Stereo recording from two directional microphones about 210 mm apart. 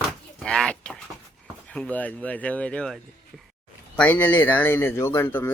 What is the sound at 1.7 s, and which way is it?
Speech, 5° left (ahead or behind).